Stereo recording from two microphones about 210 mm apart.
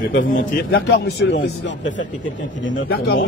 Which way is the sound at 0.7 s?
55° left (ahead or behind).